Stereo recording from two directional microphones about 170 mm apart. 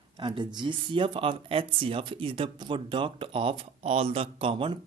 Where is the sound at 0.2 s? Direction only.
30° right (ahead or behind).